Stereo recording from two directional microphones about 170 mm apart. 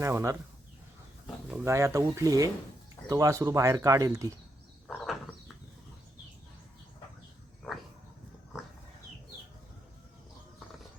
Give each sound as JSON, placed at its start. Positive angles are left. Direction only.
{"t": 0.0, "sound": "speech", "side_deg": -15}
{"t": 1.6, "sound": "speech", "side_deg": -15}
{"t": 4.9, "sound": "frog", "side_deg": 0}